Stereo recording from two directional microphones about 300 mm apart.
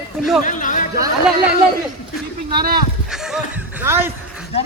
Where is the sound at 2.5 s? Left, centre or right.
Right.